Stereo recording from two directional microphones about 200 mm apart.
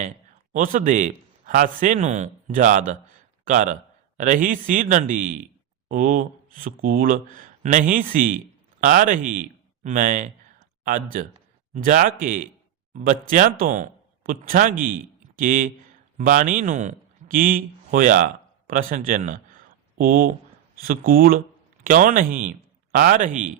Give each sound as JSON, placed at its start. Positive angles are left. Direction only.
{"t": 0.5, "sound": "a man's voice", "side_deg": -40}